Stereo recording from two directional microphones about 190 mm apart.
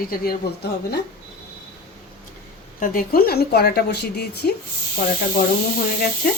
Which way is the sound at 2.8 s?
45° left (ahead or behind).